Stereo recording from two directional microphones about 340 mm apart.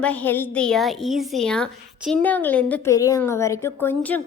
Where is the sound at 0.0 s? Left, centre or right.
Centre.